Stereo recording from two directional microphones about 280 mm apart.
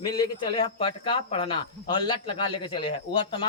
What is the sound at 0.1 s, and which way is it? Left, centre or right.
Speech, centre.